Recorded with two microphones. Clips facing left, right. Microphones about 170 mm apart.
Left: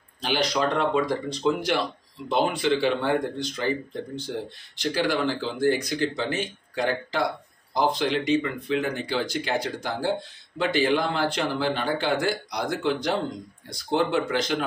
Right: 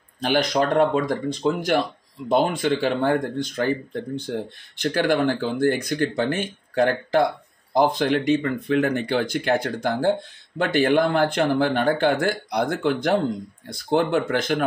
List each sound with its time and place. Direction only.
0.2 s speech: 50° right (ahead or behind)
4.7 s speech: 50° right (ahead or behind)